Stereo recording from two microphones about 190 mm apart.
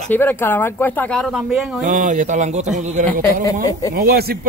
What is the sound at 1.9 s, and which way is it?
Speech, 40° right (ahead or behind).